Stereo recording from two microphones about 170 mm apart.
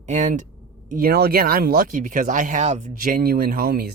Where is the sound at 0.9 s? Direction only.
60° right (ahead or behind).